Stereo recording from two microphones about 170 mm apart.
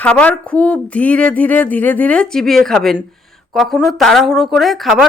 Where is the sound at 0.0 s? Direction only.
10° left (ahead or behind).